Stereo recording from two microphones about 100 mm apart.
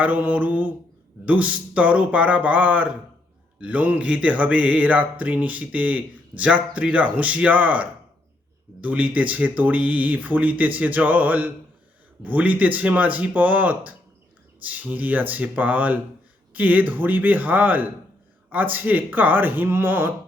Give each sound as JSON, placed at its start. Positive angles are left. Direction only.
{"t": 0.0, "sound": "speech", "side_deg": -15}